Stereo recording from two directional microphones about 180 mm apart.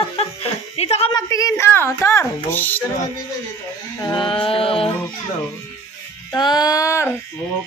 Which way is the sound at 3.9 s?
25° left (ahead or behind).